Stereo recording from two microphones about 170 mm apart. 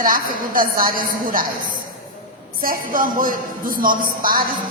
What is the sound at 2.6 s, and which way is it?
A woman's voice, 55° right (ahead or behind).